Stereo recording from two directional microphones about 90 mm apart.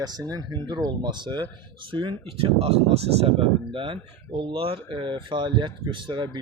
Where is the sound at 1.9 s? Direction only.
75° right (ahead or behind).